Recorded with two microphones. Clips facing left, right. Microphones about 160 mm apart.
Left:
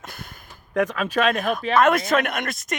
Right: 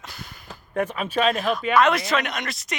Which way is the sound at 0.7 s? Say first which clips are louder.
Left 3 dB; 90° left.